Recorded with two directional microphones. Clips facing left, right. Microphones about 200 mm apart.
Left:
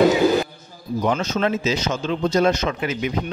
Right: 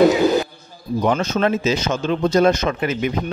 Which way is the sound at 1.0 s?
55° right (ahead or behind).